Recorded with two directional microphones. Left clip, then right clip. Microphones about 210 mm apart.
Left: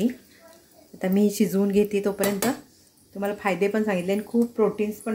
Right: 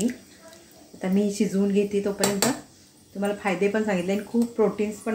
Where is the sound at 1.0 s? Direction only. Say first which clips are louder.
Left 2 dB; 35° left (ahead or behind).